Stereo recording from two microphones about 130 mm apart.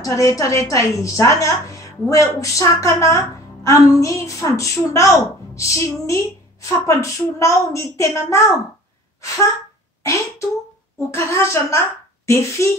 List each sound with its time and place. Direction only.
0.0 s a woman's voice: 25° left (ahead or behind)
9.2 s a sound: 25° left (ahead or behind)
10.0 s a woman's voice: 25° left (ahead or behind)